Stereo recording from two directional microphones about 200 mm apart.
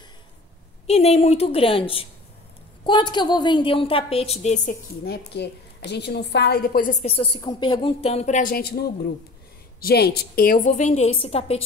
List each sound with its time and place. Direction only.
0.8 s a woman's voice: 30° left (ahead or behind)
5.0 s a woman's voice: 55° left (ahead or behind); by 11.6 s 30° left (ahead or behind)